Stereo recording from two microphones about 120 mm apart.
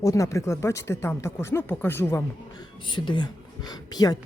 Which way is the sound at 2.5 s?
40° left (ahead or behind).